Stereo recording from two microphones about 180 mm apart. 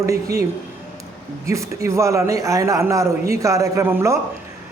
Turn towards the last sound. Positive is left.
turn(degrees=-15)  # may be behind; listen again after turning